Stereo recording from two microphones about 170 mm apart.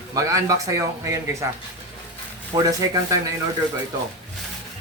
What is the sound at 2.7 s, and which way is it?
Speech, 20° right (ahead or behind).